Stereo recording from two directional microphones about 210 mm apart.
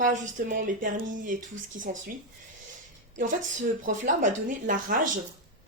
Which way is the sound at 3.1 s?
40° right (ahead or behind).